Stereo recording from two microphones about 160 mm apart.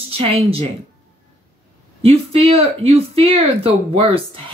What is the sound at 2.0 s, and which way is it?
Speech, 40° right (ahead or behind).